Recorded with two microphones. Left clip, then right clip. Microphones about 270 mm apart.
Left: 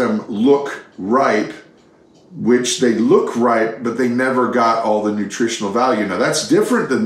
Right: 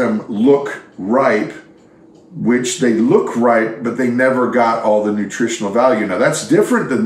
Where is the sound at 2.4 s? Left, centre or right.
Centre.